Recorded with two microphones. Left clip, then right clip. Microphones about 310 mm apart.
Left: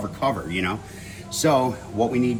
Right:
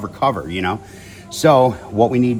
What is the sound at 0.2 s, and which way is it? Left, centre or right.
Speech, right.